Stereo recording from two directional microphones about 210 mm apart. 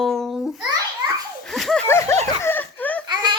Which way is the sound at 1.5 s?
Centre (ahead or behind).